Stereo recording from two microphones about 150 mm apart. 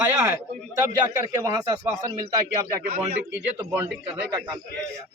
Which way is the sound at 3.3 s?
15° right (ahead or behind).